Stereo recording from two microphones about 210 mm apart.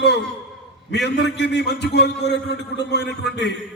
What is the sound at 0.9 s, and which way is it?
A man's voice, 55° left (ahead or behind).